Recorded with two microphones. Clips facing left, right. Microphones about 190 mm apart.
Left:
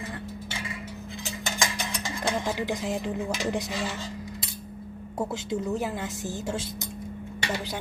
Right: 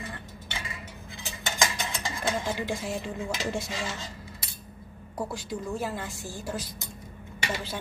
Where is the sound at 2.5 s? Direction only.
15° left (ahead or behind).